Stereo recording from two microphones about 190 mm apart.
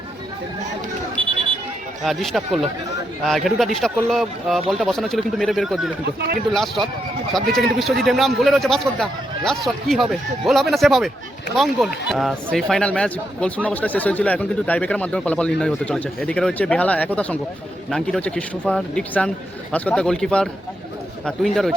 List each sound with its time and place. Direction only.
2.0 s a man's voice: centre (ahead or behind)
6.1 s speech: 55° right (ahead or behind)
6.5 s a man's voice: centre (ahead or behind)